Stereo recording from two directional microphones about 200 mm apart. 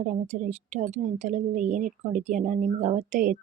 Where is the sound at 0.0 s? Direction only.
40° right (ahead or behind).